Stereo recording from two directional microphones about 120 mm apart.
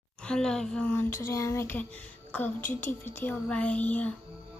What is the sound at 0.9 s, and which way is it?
Speech, 20° left (ahead or behind).